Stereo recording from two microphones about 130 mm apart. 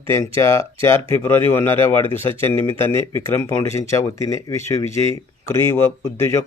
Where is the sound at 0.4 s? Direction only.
20° left (ahead or behind).